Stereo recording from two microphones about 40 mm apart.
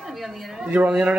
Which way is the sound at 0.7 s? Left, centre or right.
Right.